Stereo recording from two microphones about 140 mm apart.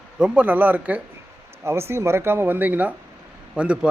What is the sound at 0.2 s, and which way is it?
A man's voice, 10° right (ahead or behind).